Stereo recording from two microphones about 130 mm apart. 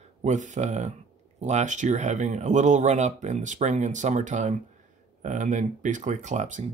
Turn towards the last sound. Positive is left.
turn(degrees=-65)  # may be behind; listen again after turning